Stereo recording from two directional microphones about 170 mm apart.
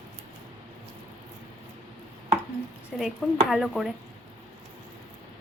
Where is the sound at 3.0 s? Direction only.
Centre (ahead or behind).